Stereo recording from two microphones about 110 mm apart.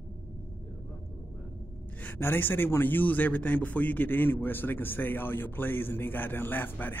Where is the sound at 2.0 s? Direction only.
20° left (ahead or behind).